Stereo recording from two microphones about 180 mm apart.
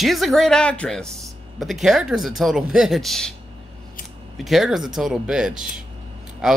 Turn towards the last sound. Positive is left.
turn(degrees=-5)  # may be behind; listen again after turning